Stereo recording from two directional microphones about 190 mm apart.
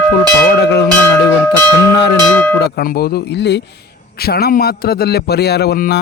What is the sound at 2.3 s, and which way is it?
Cowbell, 5° left (ahead or behind).